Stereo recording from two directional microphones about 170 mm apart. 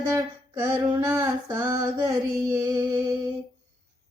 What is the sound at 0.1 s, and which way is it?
Female singing, 15° right (ahead or behind).